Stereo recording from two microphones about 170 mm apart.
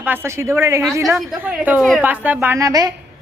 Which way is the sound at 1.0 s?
Centre (ahead or behind).